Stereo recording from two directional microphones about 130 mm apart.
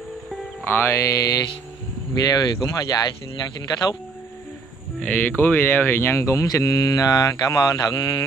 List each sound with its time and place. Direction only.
0.7 s speech: 15° left (ahead or behind)
5.0 s speech: 15° left (ahead or behind); by 8.3 s 30° left (ahead or behind)